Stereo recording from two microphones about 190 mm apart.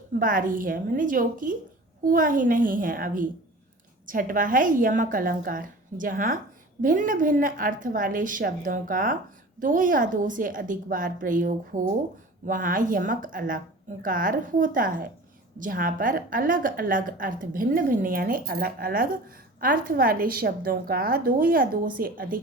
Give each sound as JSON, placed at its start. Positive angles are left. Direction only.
{"t": 0.1, "sound": "a woman's voice", "side_deg": -45}